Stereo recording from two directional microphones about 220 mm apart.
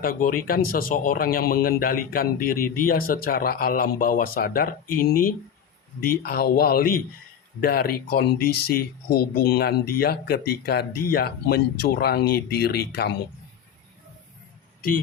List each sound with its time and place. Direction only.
0.0 s a man's voice: 40° left (ahead or behind)
14.8 s speech: 40° left (ahead or behind)